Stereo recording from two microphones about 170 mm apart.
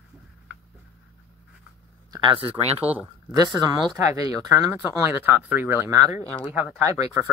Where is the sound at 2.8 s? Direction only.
10° right (ahead or behind).